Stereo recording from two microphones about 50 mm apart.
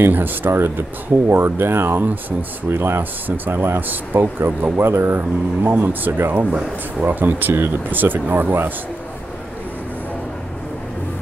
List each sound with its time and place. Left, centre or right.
0.1 s speech: right
3.0 s speech: right
4.7 s speech: right